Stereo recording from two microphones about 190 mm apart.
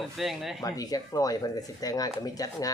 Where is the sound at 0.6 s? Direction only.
20° left (ahead or behind).